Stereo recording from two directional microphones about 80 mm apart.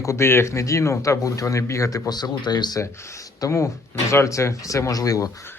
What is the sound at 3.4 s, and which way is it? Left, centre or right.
A man's voice, left.